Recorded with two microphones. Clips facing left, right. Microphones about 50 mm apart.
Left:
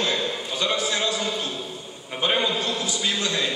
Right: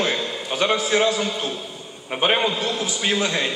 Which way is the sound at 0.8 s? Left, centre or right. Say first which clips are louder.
Right 5 dB; right.